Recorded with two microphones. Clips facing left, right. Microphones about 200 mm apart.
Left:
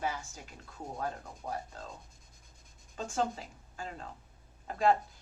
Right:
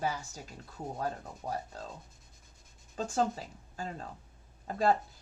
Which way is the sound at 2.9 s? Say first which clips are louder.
Right 2 dB; 35° right (ahead or behind).